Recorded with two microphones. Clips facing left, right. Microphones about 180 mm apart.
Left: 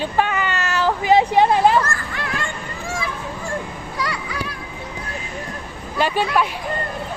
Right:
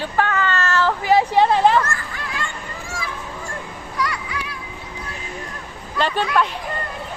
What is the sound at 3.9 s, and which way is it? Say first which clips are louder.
Music: right 1 dB; 30° left (ahead or behind).